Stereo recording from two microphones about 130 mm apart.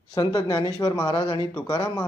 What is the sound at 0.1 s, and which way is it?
Speech, 30° left (ahead or behind).